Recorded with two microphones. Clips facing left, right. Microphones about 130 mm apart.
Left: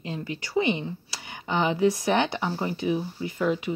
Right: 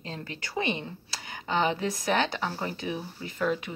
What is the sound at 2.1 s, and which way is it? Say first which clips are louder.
Speech: left 3 dB; 20° left (ahead or behind).